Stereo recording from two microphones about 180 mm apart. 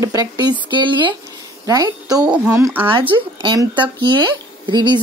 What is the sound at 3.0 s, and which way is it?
Speech, 25° right (ahead or behind).